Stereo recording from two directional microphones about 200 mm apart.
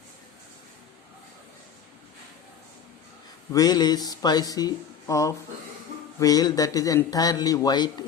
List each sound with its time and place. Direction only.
3.5 s speech: 20° left (ahead or behind)